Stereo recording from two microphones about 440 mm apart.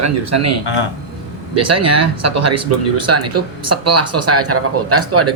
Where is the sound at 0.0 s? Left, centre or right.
Right.